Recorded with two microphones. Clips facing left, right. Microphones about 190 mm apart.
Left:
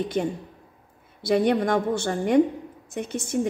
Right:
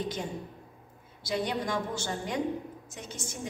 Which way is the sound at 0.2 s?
60° left (ahead or behind).